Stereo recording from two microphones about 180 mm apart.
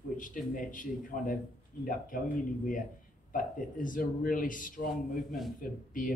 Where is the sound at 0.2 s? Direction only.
45° left (ahead or behind).